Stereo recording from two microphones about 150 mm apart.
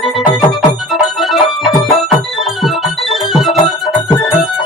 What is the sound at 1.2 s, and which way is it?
Music, centre (ahead or behind).